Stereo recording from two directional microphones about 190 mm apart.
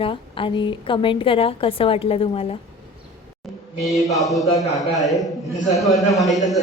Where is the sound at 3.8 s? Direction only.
Centre (ahead or behind).